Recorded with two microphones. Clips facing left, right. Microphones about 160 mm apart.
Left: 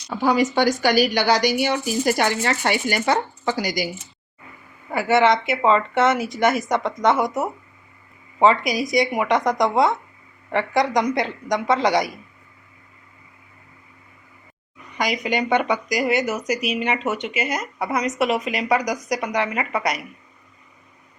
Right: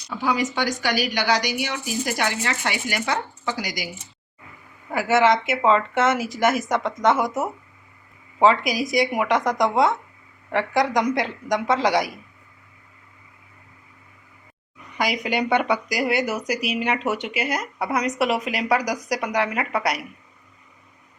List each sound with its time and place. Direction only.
0.3 s a woman's voice: 40° left (ahead or behind)
4.9 s speech: 5° right (ahead or behind)
14.9 s speech: 5° right (ahead or behind)